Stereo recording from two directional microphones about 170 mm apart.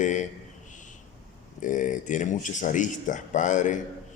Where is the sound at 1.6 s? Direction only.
50° left (ahead or behind).